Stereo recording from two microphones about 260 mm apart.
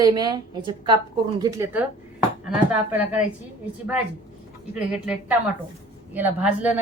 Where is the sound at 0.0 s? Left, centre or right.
Centre.